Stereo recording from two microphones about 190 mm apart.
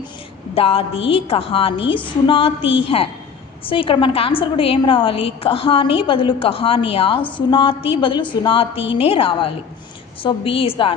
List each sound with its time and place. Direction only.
0.5 s a woman's voice: 30° left (ahead or behind)